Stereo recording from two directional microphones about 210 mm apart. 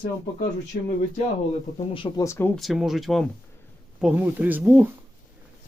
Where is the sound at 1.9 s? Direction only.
25° left (ahead or behind).